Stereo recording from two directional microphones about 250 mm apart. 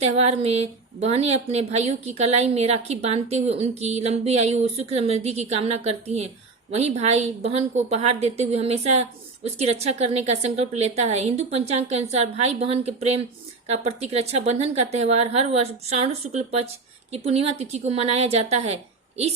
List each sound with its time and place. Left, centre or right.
0.0 s a woman's voice: right